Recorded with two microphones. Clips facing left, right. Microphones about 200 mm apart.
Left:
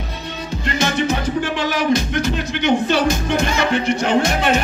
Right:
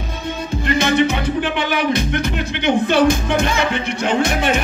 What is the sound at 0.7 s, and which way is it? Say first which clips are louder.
Music: right 3 dB; 60° right (ahead or behind).